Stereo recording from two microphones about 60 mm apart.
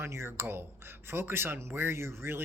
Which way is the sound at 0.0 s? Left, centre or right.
Right.